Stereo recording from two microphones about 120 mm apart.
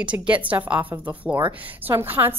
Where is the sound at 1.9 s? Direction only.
20° right (ahead or behind).